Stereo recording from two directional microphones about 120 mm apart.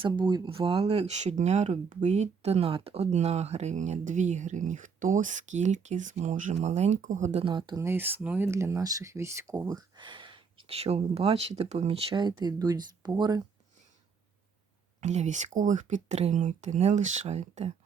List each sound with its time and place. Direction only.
0.0 s speech: 40° right (ahead or behind); by 7.4 s 75° right (ahead or behind)
7.4 s speech: 40° right (ahead or behind)
7.8 s speech: 20° right (ahead or behind); by 13.4 s 35° right (ahead or behind)
15.0 s speech: 75° right (ahead or behind)